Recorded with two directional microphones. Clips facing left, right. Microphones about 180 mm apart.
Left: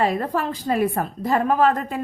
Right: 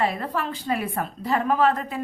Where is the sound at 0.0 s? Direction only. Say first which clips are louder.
Left 4 dB; 40° left (ahead or behind).